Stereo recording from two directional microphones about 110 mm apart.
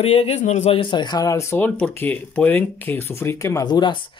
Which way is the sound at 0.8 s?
45° left (ahead or behind).